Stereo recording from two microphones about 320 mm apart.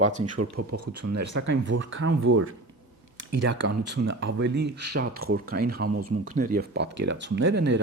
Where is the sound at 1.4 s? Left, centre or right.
Right.